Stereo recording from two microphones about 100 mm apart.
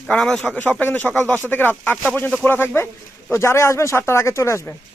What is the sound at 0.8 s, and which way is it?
Speech, 15° left (ahead or behind).